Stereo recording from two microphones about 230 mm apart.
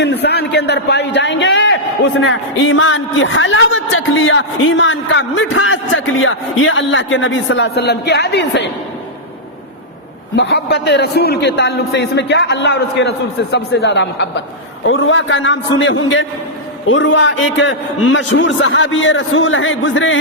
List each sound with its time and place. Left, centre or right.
0.0 s a man's voice: left
10.3 s a man's voice: left